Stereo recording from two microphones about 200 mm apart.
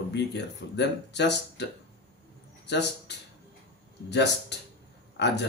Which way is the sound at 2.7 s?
60° left (ahead or behind).